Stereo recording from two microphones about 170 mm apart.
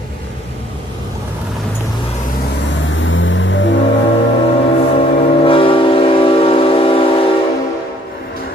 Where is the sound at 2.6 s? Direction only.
90° left.